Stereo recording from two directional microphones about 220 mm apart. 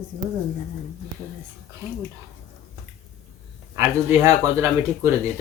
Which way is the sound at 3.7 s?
10° right (ahead or behind).